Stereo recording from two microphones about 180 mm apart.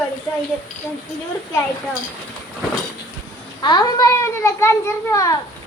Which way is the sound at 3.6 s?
20° left (ahead or behind).